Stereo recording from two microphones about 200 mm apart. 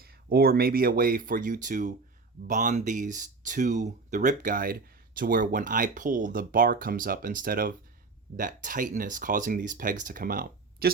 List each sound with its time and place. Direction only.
0.0 s speech: 50° right (ahead or behind)